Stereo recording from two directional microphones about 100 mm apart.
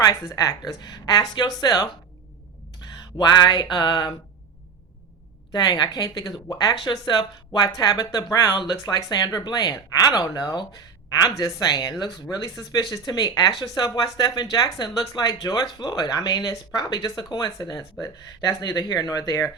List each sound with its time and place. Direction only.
0.0 s speech: 35° left (ahead or behind)
3.2 s speech: 45° left (ahead or behind)
5.5 s speech: 40° left (ahead or behind)
8.7 s speech: 35° left (ahead or behind)